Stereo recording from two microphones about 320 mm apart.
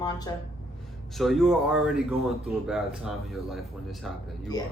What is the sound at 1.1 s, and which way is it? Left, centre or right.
Speech, centre.